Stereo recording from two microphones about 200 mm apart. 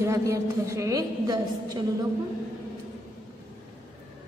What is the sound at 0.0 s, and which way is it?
A woman's voice, 15° right (ahead or behind).